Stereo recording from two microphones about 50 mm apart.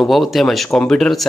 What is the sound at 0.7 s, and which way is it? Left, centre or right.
Speech, centre.